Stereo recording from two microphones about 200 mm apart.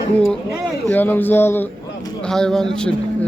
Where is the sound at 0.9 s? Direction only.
10° left (ahead or behind).